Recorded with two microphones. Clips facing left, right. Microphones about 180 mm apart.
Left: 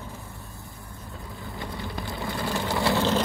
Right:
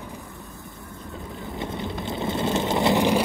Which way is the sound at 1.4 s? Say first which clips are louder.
Right 5 dB; 20° right (ahead or behind).